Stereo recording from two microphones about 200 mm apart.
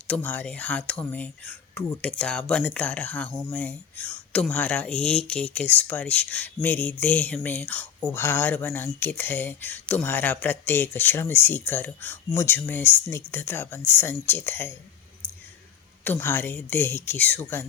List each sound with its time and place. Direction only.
0.1 s speech: 10° left (ahead or behind)
16.0 s speech: 10° left (ahead or behind)